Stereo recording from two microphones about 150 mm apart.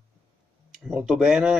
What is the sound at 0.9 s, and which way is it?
Speech, 5° right (ahead or behind).